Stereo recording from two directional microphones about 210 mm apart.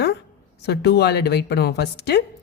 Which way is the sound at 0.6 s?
50° left (ahead or behind).